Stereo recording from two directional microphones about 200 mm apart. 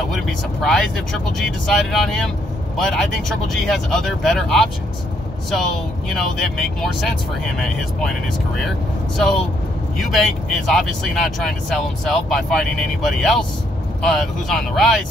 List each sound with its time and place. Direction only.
0.1 s speech: centre (ahead or behind)
8.6 s speech: centre (ahead or behind)